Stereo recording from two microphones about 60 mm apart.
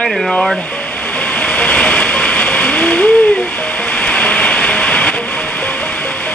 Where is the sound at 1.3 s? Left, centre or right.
Centre.